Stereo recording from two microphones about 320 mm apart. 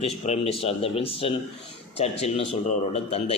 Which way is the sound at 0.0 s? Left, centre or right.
Centre.